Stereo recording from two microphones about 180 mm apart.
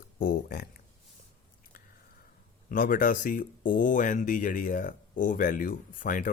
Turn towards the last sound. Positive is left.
turn(degrees=50)  # may be behind; listen again after turning